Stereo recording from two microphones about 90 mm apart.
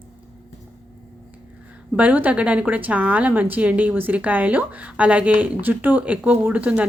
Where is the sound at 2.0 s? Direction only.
15° right (ahead or behind).